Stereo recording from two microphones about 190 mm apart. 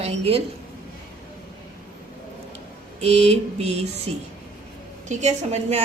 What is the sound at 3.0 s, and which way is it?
Speech, 35° right (ahead or behind).